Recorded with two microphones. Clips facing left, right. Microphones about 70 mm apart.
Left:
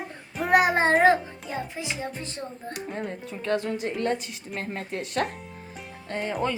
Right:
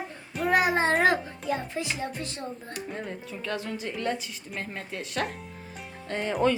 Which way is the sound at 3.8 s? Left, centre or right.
Left.